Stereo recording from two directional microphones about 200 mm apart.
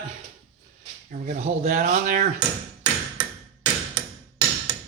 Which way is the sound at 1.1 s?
35° right (ahead or behind).